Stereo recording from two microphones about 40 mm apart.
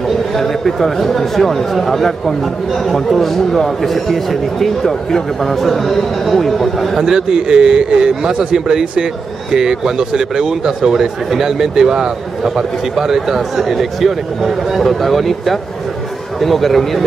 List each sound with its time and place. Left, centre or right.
0.4 s a man's voice: centre
7.0 s a man's voice: centre